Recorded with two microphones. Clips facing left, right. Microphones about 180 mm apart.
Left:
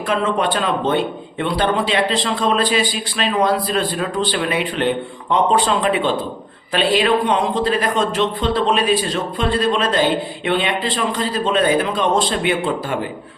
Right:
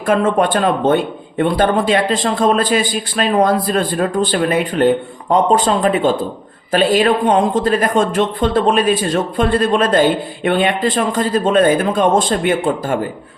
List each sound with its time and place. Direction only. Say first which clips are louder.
0.1 s speech: right 5 dB; 50° right (ahead or behind)